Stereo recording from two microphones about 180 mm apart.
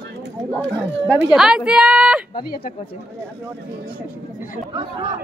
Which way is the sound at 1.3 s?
5° right (ahead or behind).